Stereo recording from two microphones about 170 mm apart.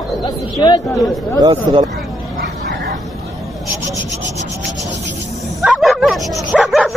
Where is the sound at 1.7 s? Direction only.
30° right (ahead or behind).